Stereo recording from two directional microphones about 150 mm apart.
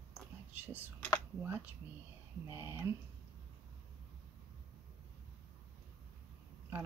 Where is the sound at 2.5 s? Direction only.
20° right (ahead or behind).